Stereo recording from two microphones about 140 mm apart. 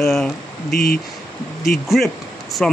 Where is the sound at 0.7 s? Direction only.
90° left.